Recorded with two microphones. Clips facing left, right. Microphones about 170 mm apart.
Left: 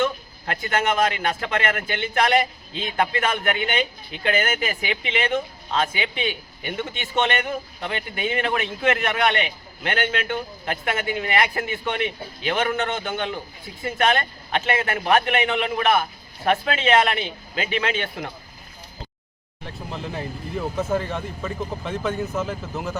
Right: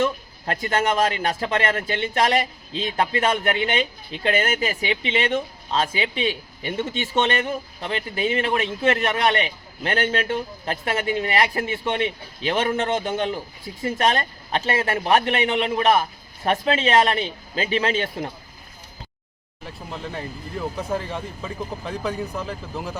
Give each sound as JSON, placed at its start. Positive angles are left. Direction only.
{"t": 0.0, "sound": "a man's voice", "side_deg": -35}
{"t": 19.6, "sound": "speech", "side_deg": 0}